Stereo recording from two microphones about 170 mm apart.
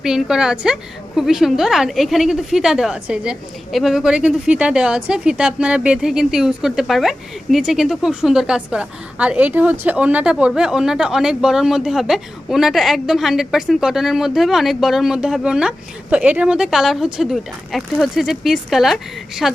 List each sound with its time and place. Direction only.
0.0 s a woman's voice: 5° right (ahead or behind)